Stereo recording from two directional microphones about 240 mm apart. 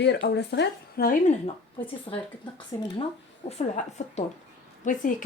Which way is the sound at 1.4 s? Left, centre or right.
Left.